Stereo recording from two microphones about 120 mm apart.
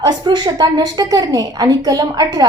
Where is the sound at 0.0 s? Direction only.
35° right (ahead or behind).